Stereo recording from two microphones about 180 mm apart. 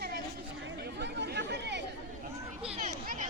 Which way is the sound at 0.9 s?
70° right (ahead or behind).